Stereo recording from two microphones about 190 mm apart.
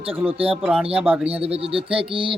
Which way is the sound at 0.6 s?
Centre (ahead or behind).